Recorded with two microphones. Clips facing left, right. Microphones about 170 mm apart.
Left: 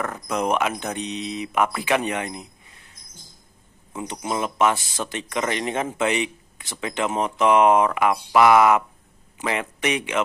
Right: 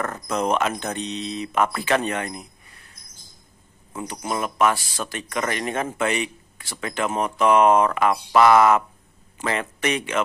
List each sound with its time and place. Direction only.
0.0 s speech: 10° left (ahead or behind)
3.9 s speech: 20° left (ahead or behind)